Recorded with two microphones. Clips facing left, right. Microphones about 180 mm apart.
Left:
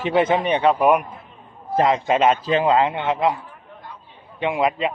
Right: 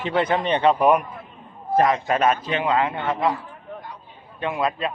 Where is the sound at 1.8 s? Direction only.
25° left (ahead or behind).